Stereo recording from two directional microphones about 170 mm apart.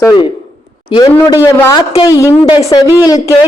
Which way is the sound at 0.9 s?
30° left (ahead or behind).